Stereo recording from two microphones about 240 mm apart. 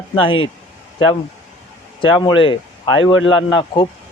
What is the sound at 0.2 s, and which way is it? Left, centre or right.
Speech, left.